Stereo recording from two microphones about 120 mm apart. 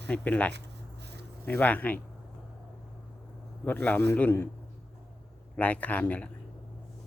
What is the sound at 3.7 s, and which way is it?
Speech, 15° left (ahead or behind).